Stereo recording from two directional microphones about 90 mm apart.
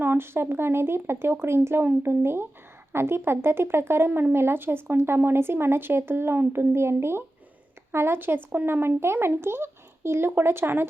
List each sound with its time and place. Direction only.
0.0 s speech: 25° right (ahead or behind)